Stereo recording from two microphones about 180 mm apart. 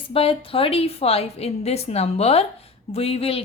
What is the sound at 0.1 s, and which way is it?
A woman's voice, 30° left (ahead or behind).